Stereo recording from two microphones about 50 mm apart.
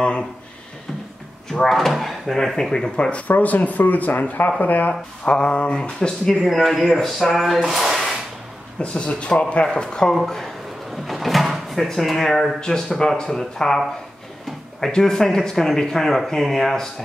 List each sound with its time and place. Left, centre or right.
1.5 s speech: centre
3.0 s speech: left
5.3 s speech: centre
6.4 s a sound: centre
8.9 s speech: left
10.1 s a sound: centre
11.1 s speech: centre